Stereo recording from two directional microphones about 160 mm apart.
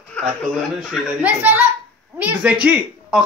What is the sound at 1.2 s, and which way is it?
Child singing, 10° right (ahead or behind).